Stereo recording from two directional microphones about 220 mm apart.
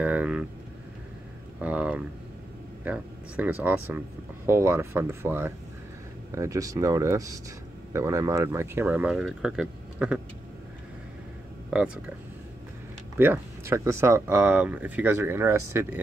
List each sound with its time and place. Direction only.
0.0 s vehicle: 5° right (ahead or behind)
1.6 s a sound: 5° right (ahead or behind)
2.8 s speech: 5° right (ahead or behind)
11.7 s speech: 5° right (ahead or behind)
13.2 s speech: 10° right (ahead or behind)